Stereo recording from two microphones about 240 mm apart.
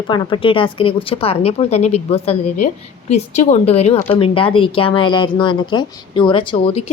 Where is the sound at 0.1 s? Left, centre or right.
Left.